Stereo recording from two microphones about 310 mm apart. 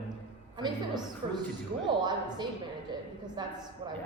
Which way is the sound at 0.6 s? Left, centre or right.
Centre.